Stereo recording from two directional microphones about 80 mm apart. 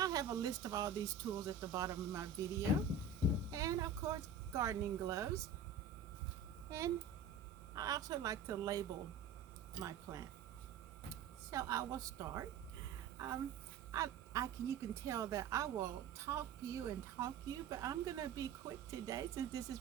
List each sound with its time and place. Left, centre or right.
0.0 s speech: right
6.7 s speech: right
11.5 s a woman's voice: right